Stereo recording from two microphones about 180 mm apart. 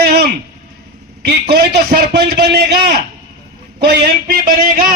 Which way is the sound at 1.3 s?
65° right (ahead or behind).